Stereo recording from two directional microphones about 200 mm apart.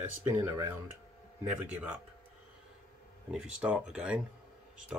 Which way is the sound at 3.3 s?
5° right (ahead or behind).